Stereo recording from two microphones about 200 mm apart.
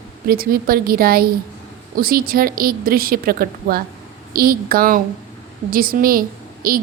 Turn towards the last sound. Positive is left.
turn(degrees=-45)  # may be behind; listen again after turning